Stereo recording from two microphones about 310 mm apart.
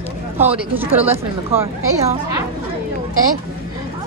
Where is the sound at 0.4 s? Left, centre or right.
Centre.